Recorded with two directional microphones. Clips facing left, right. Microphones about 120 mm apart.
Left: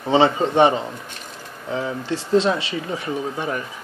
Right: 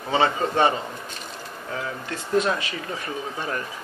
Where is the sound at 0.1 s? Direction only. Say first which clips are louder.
Left 5 dB; 25° left (ahead or behind).